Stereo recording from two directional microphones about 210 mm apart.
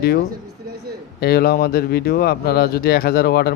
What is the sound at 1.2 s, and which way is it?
Speech, 45° left (ahead or behind).